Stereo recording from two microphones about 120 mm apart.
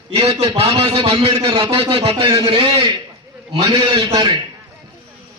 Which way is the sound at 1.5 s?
35° right (ahead or behind).